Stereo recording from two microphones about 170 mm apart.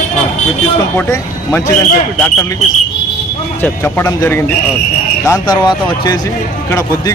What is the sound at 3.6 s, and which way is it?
Speech, 10° left (ahead or behind).